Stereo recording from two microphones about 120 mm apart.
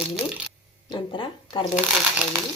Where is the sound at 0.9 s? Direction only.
45° left (ahead or behind).